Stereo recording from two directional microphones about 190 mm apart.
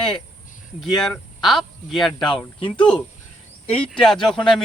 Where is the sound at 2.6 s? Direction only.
25° left (ahead or behind).